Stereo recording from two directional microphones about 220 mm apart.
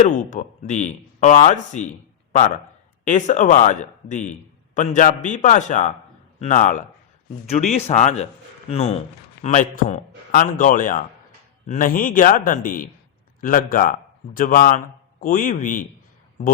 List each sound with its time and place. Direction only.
0.1 s a man's voice: 35° left (ahead or behind)
3.0 s a man's voice: 35° left (ahead or behind)